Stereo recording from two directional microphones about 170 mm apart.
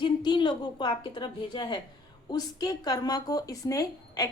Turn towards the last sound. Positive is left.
turn(degrees=20)  # may be behind; listen again after turning